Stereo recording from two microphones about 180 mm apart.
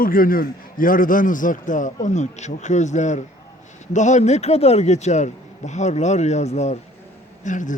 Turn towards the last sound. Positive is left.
turn(degrees=45)  # may be behind; listen again after turning